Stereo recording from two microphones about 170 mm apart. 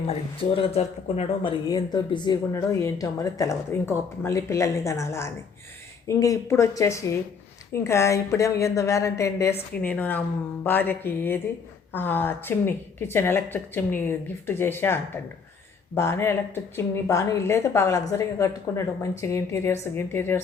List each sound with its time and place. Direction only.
0.1 s speech: 35° left (ahead or behind)
1.6 s speech: 25° left (ahead or behind)